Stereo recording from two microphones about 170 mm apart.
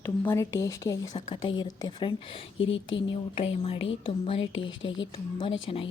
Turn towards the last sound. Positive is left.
turn(degrees=30)  # may be behind; listen again after turning